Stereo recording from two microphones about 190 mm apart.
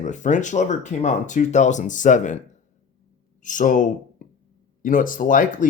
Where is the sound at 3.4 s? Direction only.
40° left (ahead or behind).